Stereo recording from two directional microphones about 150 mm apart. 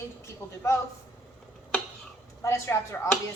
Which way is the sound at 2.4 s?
20° left (ahead or behind).